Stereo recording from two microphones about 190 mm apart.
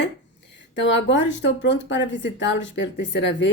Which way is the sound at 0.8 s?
70° left (ahead or behind).